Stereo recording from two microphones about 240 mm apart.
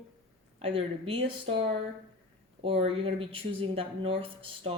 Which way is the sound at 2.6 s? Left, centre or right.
Right.